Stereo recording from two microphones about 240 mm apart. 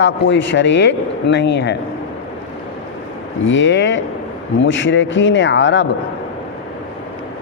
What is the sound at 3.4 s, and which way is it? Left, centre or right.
A man's voice, left.